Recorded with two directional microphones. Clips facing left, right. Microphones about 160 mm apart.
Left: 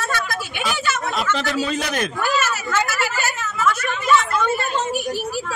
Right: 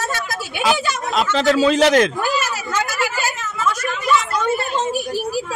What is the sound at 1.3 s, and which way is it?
Speech, 90° right.